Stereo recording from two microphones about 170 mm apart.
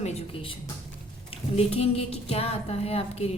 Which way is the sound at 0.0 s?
40° left (ahead or behind).